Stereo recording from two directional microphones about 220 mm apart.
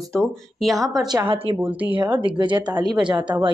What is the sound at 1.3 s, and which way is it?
Speech, 25° right (ahead or behind).